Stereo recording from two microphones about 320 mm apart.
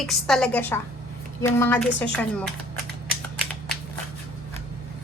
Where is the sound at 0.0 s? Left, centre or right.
Centre.